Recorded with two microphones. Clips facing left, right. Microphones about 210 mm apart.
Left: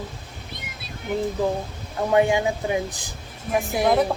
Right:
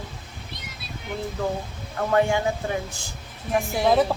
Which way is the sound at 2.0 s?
20° left (ahead or behind).